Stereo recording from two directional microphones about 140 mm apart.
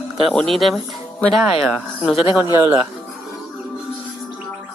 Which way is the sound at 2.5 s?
15° right (ahead or behind).